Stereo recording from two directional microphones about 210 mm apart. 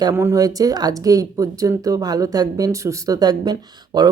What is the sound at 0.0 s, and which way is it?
Speech, 15° right (ahead or behind).